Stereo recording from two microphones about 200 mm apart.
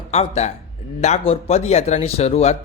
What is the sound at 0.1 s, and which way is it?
A man's voice, 35° left (ahead or behind).